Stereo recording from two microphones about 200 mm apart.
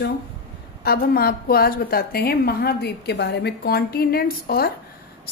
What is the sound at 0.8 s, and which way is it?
A woman's voice, 50° left (ahead or behind).